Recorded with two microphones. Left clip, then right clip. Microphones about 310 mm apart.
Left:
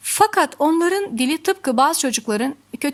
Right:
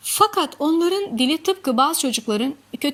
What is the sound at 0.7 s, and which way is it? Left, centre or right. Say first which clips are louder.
Speech: left 1 dB; centre.